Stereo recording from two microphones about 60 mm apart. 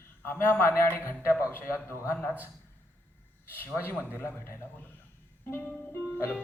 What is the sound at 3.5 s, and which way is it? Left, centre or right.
A man's voice, left.